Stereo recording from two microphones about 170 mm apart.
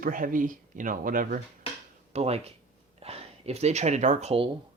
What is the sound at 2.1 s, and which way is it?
Speech, 35° right (ahead or behind).